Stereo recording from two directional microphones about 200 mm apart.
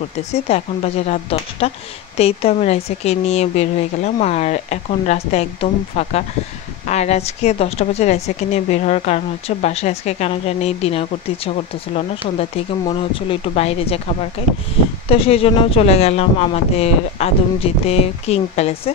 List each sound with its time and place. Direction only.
0.3 s a woman's voice: 30° left (ahead or behind)